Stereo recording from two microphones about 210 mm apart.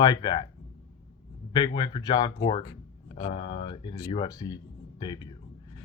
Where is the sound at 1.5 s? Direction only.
20° left (ahead or behind).